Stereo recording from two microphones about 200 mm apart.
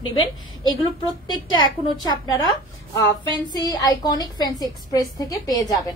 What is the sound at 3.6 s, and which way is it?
Speech, 20° left (ahead or behind).